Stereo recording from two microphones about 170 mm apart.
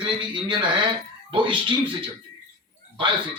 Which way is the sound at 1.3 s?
30° right (ahead or behind).